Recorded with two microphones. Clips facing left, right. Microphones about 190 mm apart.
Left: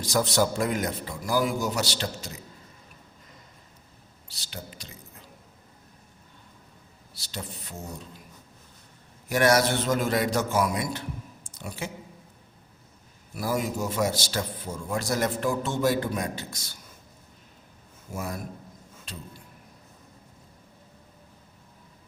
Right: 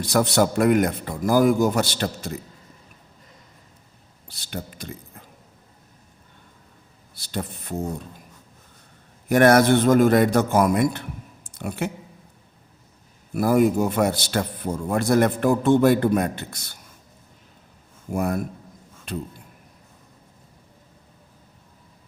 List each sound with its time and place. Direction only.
0.0 s a man's voice: 65° right (ahead or behind)
4.3 s speech: 55° right (ahead or behind)
7.1 s a man's voice: 55° right (ahead or behind)
9.3 s a man's voice: 55° right (ahead or behind)
13.3 s a man's voice: 55° right (ahead or behind)
18.1 s a man's voice: 55° right (ahead or behind)